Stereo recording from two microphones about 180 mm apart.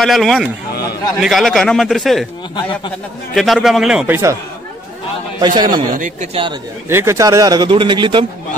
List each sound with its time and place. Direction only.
0.0 s a man's voice: centre (ahead or behind)
3.3 s a man's voice: centre (ahead or behind)
4.1 s speech: 15° right (ahead or behind)
5.4 s speech: 25° right (ahead or behind)
5.9 s speech: 50° right (ahead or behind)
6.3 s speech: 30° right (ahead or behind)
6.9 s speech: 15° right (ahead or behind)